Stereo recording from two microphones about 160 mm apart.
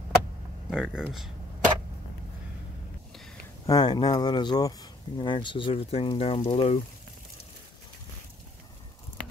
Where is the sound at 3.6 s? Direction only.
25° left (ahead or behind).